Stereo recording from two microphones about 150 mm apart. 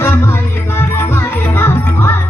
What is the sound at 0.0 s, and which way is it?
Music, 15° left (ahead or behind).